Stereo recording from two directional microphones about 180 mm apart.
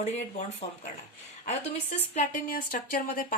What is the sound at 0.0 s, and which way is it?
Speech, 40° left (ahead or behind).